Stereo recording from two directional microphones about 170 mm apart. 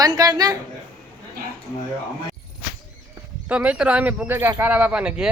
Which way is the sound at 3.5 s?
5° right (ahead or behind).